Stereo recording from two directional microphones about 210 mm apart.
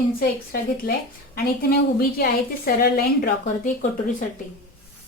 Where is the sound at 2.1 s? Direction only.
45° left (ahead or behind).